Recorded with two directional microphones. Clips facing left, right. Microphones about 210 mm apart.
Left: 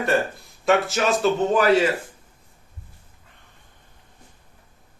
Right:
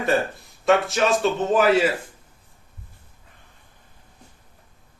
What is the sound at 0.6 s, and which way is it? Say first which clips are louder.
Speech: right 1 dB; centre (ahead or behind).